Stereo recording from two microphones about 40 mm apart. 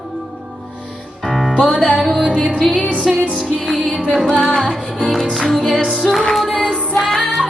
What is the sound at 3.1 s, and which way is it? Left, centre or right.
Music, centre.